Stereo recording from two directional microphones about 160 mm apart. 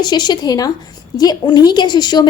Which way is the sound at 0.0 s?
25° left (ahead or behind).